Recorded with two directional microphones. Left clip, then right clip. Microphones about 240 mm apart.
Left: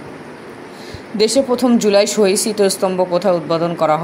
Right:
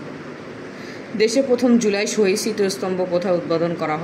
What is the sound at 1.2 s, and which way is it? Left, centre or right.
Speech, left.